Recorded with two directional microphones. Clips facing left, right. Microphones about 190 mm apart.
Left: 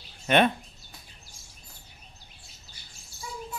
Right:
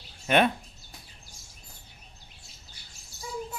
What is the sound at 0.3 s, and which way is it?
Speech, 5° right (ahead or behind).